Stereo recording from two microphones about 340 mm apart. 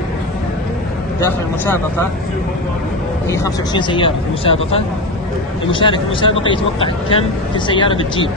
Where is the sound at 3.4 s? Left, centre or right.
Centre.